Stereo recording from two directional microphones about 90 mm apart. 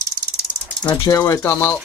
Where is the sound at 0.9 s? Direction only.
40° left (ahead or behind).